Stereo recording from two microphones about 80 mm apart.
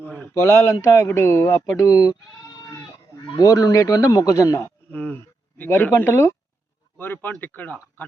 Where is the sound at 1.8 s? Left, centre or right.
Left.